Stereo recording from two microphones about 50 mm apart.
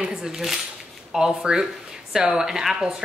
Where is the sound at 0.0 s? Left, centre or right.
Centre.